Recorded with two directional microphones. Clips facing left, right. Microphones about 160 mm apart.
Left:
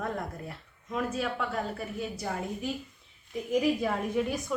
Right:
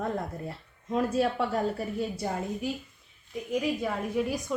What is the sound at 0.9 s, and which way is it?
A woman's voice, 35° right (ahead or behind).